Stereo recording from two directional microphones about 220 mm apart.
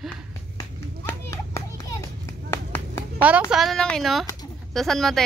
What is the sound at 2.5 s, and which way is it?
Clapping, 10° left (ahead or behind).